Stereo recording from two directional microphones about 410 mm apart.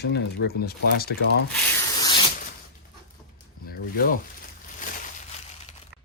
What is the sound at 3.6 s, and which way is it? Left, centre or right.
Speech, left.